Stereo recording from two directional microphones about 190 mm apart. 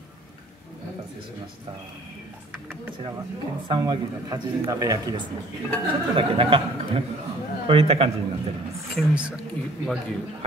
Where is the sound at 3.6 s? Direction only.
20° right (ahead or behind).